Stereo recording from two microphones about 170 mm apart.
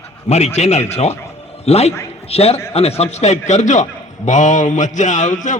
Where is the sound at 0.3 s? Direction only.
40° left (ahead or behind).